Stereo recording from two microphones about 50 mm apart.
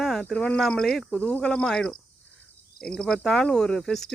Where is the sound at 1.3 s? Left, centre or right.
Centre.